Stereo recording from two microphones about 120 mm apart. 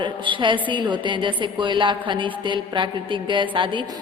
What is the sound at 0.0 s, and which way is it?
A woman's voice, 40° right (ahead or behind).